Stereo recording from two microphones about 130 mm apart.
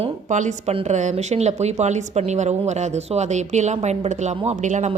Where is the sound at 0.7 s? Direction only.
55° right (ahead or behind).